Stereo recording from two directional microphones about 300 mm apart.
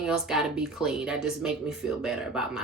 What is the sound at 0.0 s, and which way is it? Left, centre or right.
Speech, centre.